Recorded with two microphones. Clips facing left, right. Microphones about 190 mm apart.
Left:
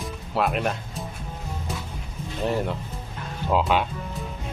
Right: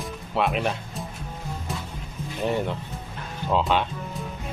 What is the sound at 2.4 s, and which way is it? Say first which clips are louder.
Speech: even; centre (ahead or behind).